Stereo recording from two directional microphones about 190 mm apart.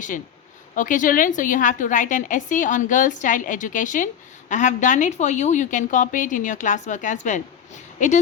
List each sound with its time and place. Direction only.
0.8 s a woman's voice: 45° left (ahead or behind)